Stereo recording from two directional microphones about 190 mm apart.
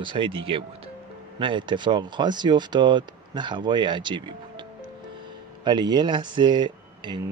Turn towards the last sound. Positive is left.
turn(degrees=-25)  # may be behind; listen again after turning